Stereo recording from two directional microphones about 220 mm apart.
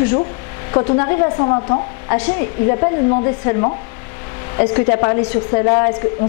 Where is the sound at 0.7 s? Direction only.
25° left (ahead or behind).